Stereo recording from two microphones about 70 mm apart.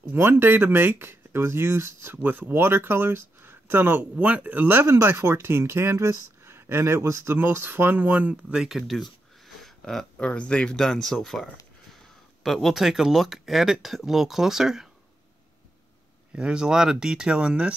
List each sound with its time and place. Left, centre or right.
0.0 s speech: right
8.6 s speech: centre
9.6 s a sound: centre
10.2 s speech: centre
12.4 s speech: centre
16.3 s speech: centre